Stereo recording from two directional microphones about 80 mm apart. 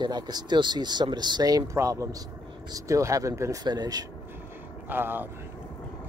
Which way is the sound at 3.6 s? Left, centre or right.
Right.